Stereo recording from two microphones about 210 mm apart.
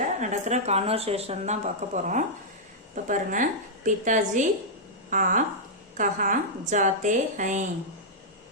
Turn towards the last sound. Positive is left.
turn(degrees=-35)  # may be behind; listen again after turning